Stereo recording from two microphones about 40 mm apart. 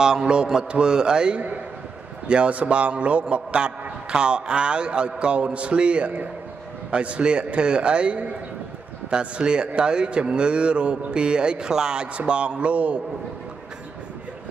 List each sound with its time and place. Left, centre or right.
0.0 s a man's voice: centre; by 13.0 s right